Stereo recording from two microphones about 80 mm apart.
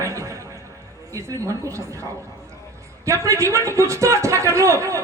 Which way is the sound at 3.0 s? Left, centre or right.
Right.